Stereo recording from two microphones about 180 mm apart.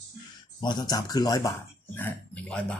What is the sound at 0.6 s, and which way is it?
Speech, 25° left (ahead or behind).